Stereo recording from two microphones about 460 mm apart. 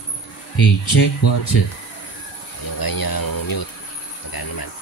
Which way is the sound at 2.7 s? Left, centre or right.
Left.